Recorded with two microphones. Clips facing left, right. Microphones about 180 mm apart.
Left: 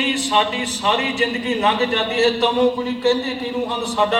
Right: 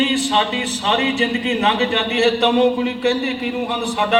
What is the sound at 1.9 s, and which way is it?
A man's voice, 65° right (ahead or behind).